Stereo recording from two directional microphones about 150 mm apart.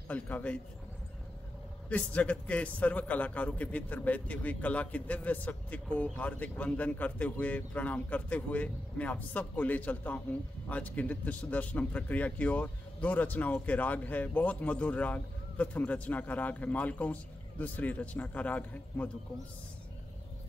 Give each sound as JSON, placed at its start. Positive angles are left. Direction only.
{"t": 0.1, "sound": "a man's voice", "side_deg": 10}
{"t": 1.9, "sound": "a man's voice", "side_deg": 10}